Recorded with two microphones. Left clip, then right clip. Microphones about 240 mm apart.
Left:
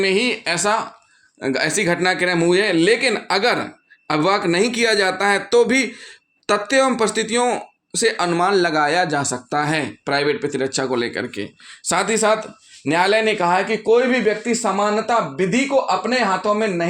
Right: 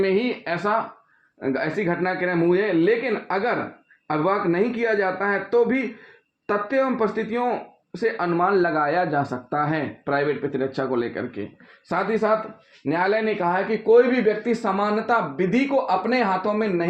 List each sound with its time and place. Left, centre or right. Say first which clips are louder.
0.0 s speech: left 4 dB; left
11.9 s speech: left 4 dB; left